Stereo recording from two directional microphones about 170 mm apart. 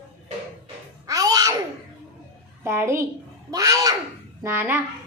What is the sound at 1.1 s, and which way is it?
Music, 20° right (ahead or behind).